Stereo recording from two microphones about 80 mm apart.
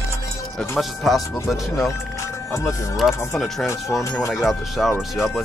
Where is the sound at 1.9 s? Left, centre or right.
Left.